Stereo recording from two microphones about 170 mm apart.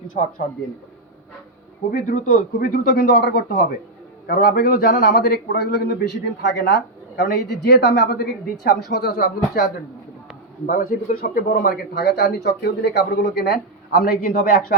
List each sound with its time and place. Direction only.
0.2 s speech: 50° left (ahead or behind)
1.9 s speech: 50° left (ahead or behind); by 3.6 s 80° left
4.3 s a man's voice: 60° left (ahead or behind)
10.7 s speech: 55° left (ahead or behind)